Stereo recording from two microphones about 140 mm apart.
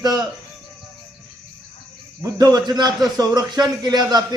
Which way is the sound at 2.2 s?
25° right (ahead or behind).